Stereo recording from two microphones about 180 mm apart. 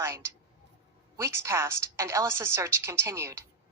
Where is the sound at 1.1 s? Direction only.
15° right (ahead or behind).